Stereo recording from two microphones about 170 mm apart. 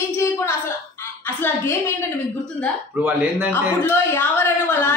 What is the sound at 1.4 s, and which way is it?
Speech, 15° left (ahead or behind).